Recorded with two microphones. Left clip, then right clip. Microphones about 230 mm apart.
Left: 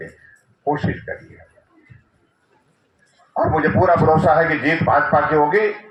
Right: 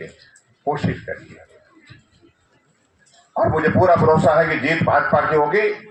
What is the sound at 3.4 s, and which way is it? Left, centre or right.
Speech, left.